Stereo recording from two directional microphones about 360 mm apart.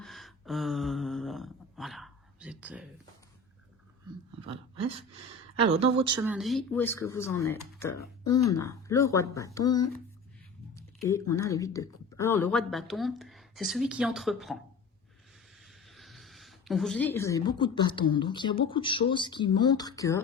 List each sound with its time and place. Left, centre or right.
0.0 s a sound: centre
5.5 s speech: centre
15.9 s a woman's voice: centre